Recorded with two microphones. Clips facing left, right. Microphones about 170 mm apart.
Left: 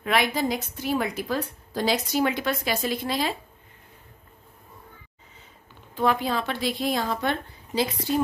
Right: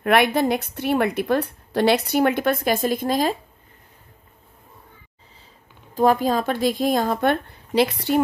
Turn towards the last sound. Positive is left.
turn(degrees=-60)  # may be behind; listen again after turning